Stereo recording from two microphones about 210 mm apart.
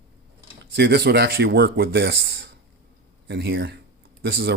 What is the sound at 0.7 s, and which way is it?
Speech, 50° right (ahead or behind).